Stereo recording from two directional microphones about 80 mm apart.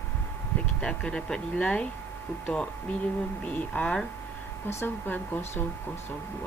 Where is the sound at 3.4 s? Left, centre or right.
Centre.